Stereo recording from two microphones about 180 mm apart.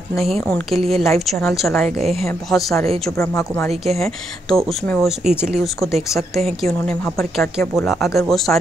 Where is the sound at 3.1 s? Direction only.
15° left (ahead or behind).